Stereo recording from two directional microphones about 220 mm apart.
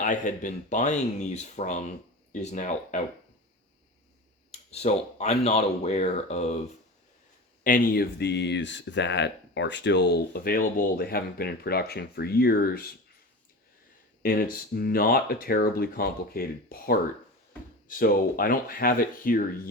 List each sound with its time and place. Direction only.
0.0 s speech: 35° left (ahead or behind)
4.7 s speech: 30° left (ahead or behind)
7.6 s speech: 40° left (ahead or behind)
14.2 s speech: 40° left (ahead or behind)